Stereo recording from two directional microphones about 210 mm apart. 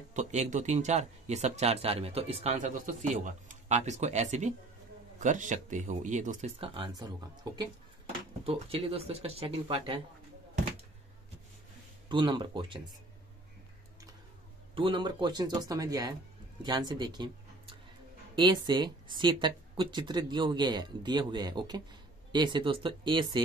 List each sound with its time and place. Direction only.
0.1 s speech: 35° right (ahead or behind)
8.5 s speech: 25° right (ahead or behind)
12.1 s speech: 20° right (ahead or behind)
14.8 s speech: 25° right (ahead or behind)